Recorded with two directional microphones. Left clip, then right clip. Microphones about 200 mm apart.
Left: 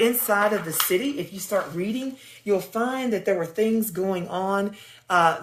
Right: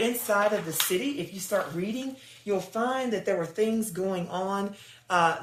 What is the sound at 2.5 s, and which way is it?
Speech, 55° left (ahead or behind).